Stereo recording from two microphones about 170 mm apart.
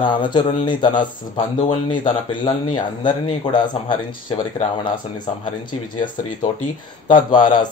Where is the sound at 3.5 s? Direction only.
25° left (ahead or behind).